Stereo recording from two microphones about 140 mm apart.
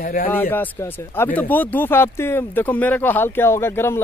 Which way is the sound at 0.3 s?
15° left (ahead or behind).